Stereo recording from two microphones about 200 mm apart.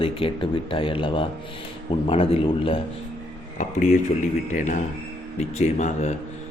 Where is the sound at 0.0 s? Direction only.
25° left (ahead or behind).